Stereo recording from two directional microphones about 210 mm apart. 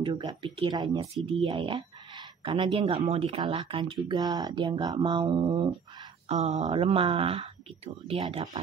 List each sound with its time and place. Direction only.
0.0 s speech: 20° right (ahead or behind)